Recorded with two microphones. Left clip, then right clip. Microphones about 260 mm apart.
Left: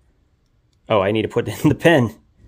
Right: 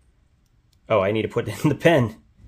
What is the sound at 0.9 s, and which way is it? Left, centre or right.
Speech, centre.